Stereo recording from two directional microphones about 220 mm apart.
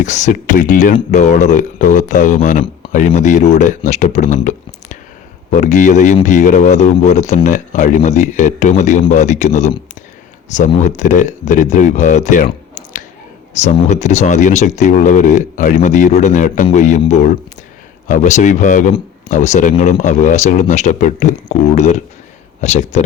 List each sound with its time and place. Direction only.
0.0 s speech: 35° left (ahead or behind)